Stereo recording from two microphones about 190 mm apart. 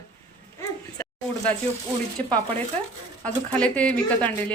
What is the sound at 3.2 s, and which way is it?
Speech, 5° left (ahead or behind).